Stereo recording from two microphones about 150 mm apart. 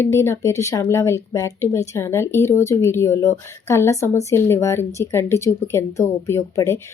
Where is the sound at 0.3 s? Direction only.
20° left (ahead or behind).